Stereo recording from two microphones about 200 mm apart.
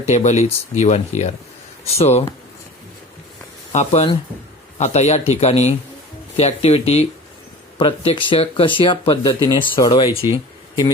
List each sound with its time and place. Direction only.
0.0 s speech: 35° left (ahead or behind)
3.7 s speech: 35° left (ahead or behind)